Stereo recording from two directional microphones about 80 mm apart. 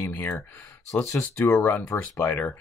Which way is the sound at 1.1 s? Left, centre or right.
Left.